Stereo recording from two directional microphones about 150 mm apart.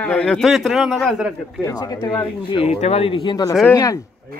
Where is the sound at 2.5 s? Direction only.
40° left (ahead or behind); by 4.0 s 20° left (ahead or behind).